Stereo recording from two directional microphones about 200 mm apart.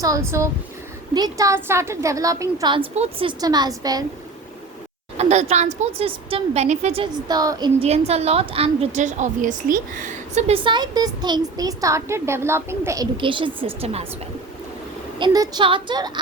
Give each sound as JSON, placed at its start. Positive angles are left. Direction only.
{"t": 0.0, "sound": "a woman's voice", "side_deg": -15}
{"t": 5.1, "sound": "a woman's voice", "side_deg": -35}
{"t": 15.2, "sound": "a woman's voice", "side_deg": -20}